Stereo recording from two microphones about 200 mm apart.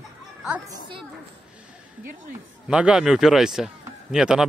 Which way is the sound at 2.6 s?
5° right (ahead or behind).